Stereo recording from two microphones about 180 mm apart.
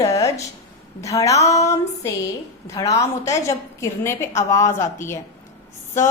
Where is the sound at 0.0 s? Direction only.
20° left (ahead or behind).